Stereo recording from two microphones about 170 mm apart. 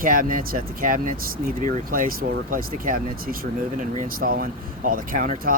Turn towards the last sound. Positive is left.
turn(degrees=-55)  # may be behind; listen again after turning